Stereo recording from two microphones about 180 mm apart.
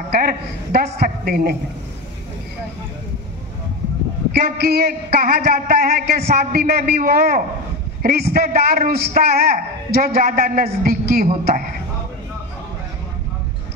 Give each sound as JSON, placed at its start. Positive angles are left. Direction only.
{"t": 0.1, "sound": "a woman's voice", "side_deg": -55}
{"t": 4.3, "sound": "a man's voice", "side_deg": -60}